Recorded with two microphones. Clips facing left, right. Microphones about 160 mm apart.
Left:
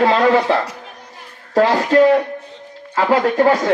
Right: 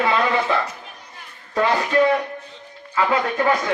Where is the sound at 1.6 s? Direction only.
40° left (ahead or behind).